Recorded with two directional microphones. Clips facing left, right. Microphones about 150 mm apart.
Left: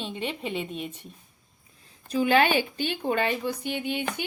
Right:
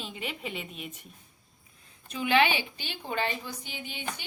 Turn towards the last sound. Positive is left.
turn(degrees=60)  # may be behind; listen again after turning